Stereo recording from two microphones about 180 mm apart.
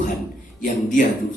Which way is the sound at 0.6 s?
45° left (ahead or behind).